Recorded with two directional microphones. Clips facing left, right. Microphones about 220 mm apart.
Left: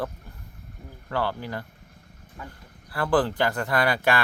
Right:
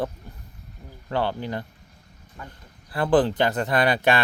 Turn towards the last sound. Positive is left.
turn(degrees=-20)  # may be behind; listen again after turning